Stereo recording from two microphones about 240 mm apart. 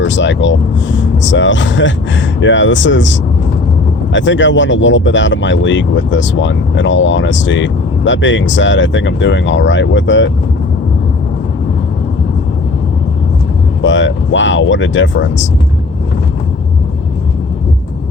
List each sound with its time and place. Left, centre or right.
0.0 s speech: left
13.8 s speech: left